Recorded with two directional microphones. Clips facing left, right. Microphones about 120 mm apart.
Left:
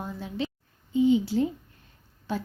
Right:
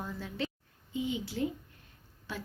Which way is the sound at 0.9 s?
30° left (ahead or behind).